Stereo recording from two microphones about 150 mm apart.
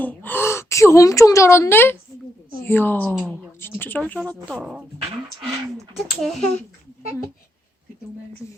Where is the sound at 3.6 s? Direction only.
15° left (ahead or behind).